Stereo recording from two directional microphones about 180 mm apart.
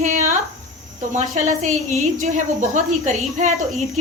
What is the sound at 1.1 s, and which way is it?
Speech, 40° right (ahead or behind).